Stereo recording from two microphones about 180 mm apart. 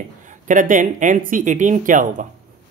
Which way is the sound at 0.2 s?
45° right (ahead or behind).